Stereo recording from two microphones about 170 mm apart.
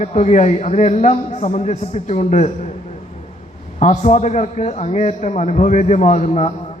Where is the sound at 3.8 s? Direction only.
40° left (ahead or behind).